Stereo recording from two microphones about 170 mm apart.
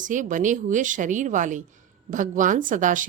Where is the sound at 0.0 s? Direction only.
50° right (ahead or behind).